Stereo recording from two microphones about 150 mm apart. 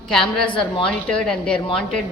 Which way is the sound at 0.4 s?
35° left (ahead or behind).